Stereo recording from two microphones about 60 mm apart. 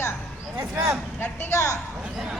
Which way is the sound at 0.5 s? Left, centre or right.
Right.